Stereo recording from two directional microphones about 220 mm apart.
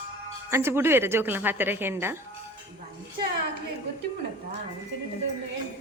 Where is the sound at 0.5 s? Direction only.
10° right (ahead or behind).